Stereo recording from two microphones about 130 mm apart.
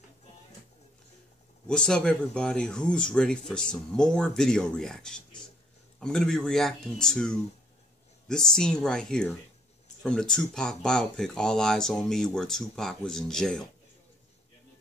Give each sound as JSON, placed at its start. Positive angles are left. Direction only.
{"t": 1.7, "sound": "speech", "side_deg": 5}